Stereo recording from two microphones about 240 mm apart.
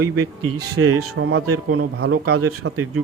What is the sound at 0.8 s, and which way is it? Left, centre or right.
A man's voice, right.